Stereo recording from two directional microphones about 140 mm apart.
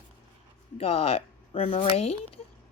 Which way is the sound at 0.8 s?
45° left (ahead or behind).